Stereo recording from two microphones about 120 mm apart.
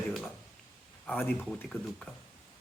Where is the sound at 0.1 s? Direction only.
5° left (ahead or behind).